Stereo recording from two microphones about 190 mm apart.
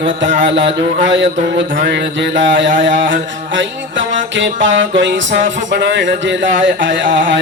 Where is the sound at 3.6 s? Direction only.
80° right.